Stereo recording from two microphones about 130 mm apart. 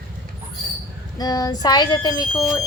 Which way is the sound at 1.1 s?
30° left (ahead or behind).